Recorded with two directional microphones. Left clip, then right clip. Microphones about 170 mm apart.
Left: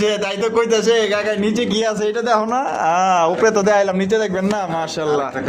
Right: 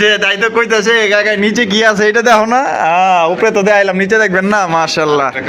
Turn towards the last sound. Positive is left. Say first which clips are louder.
# right 6 dB
turn(degrees=-10)  # may be behind; listen again after turning